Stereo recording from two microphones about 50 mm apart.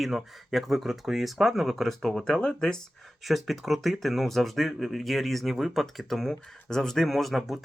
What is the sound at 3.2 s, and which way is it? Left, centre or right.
Speech, centre.